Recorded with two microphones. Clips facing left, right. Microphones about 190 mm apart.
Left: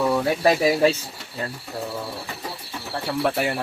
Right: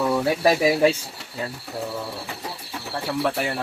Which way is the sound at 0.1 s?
5° right (ahead or behind).